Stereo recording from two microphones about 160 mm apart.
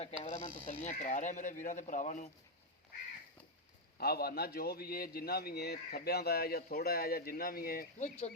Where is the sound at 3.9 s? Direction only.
75° left (ahead or behind).